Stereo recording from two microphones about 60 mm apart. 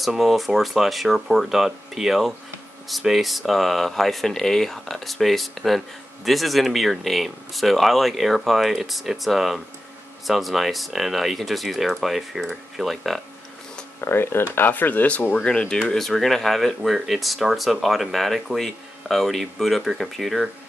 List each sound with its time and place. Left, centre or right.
0.0 s speech: centre
14.0 s speech: left
15.4 s speech: centre